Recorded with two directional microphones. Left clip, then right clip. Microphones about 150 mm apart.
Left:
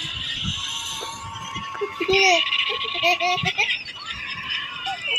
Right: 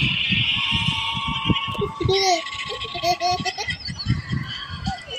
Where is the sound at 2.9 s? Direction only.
45° right (ahead or behind).